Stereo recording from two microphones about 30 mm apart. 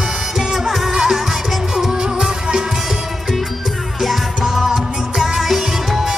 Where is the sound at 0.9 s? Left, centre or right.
Right.